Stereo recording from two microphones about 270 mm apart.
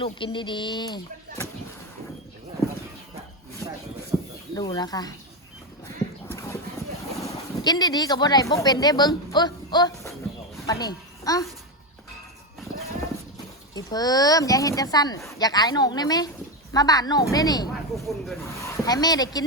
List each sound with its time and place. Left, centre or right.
0.0 s speech: centre
3.6 s a sound: centre
4.1 s a sound: centre
4.5 s speech: centre
6.2 s clip-clop: centre
7.2 s a child's voice: centre
13.7 s speech: centre
17.9 s speech: centre
18.4 s speech: centre